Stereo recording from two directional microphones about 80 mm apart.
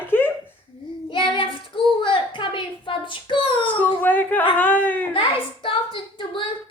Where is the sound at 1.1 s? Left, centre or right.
Left.